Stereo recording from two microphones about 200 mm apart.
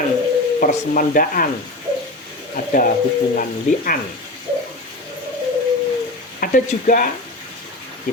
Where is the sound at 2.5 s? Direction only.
40° left (ahead or behind).